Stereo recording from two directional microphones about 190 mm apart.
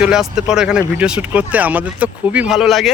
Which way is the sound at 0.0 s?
5° right (ahead or behind).